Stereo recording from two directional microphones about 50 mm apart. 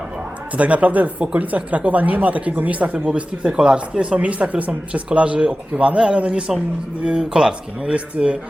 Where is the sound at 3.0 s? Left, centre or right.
Centre.